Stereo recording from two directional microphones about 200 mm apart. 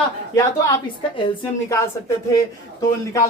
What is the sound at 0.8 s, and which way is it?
Speech, 25° left (ahead or behind).